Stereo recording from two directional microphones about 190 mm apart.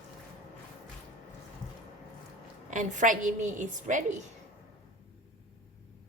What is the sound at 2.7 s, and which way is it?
Speech, 40° right (ahead or behind).